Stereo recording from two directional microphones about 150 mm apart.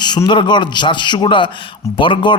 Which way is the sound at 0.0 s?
30° left (ahead or behind).